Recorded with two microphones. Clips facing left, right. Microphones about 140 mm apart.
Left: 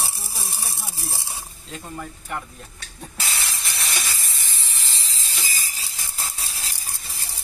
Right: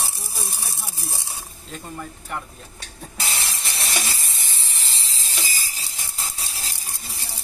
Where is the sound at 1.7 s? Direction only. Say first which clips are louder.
Even; centre (ahead or behind).